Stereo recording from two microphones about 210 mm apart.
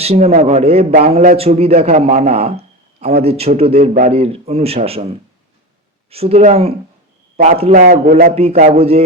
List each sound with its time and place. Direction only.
0.0 s a man's voice: 30° right (ahead or behind)
6.1 s a man's voice: 30° right (ahead or behind); by 8.3 s 45° right (ahead or behind)
8.4 s a man's voice: 30° right (ahead or behind)